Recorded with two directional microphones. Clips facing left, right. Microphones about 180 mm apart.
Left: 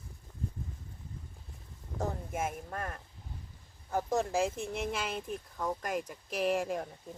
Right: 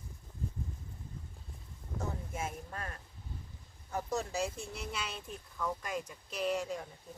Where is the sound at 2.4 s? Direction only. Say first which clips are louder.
Left 7 dB; 50° left (ahead or behind).